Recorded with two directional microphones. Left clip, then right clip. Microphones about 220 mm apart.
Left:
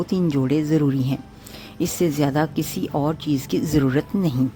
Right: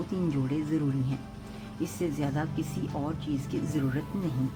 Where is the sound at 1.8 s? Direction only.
40° left (ahead or behind).